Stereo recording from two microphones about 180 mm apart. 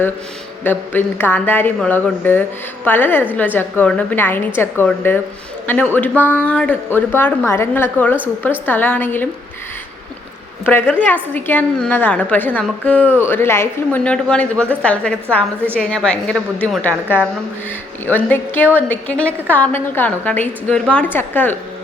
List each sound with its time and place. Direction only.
0.6 s speech: 10° left (ahead or behind)
10.7 s a woman's voice: 10° left (ahead or behind)
18.0 s speech: 10° left (ahead or behind)